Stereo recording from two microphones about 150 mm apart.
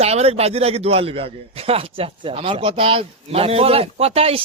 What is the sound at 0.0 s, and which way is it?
A man's voice, 45° right (ahead or behind).